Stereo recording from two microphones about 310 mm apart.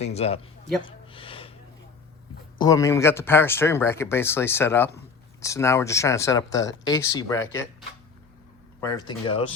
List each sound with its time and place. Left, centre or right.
0.0 s speech: centre
0.9 s a sound: centre
2.6 s speech: centre